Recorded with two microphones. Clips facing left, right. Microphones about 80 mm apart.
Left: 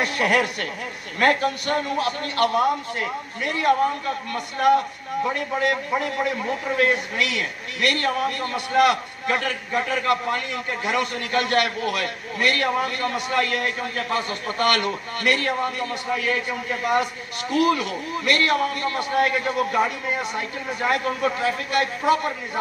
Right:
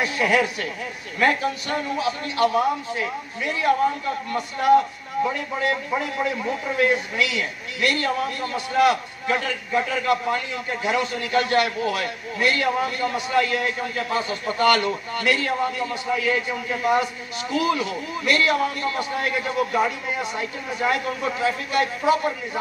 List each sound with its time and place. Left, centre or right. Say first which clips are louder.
0.0 s a man's voice: even; left
5.6 s a man's voice: left 1 dB; left